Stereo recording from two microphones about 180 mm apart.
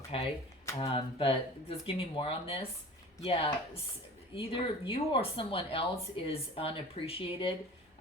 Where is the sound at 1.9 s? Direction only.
30° left (ahead or behind).